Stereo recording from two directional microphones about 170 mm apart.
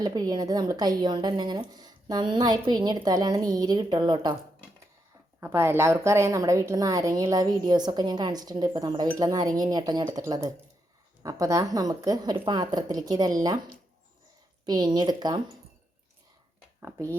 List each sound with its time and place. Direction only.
0.0 s a woman's voice: 25° right (ahead or behind)
5.4 s a woman's voice: 15° right (ahead or behind)